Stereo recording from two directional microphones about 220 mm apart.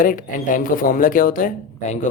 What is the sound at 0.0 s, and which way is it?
Speech, 35° left (ahead or behind).